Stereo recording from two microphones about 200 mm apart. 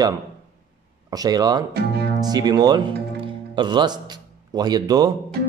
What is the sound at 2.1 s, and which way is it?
Speech, 20° right (ahead or behind).